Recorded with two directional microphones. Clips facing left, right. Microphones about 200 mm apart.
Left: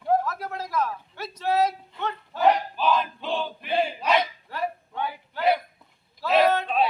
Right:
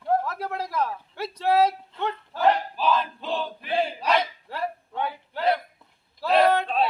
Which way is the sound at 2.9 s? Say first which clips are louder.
Even; 5° left (ahead or behind).